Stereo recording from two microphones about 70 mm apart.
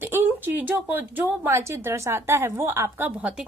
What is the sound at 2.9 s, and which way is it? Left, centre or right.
Speech, right.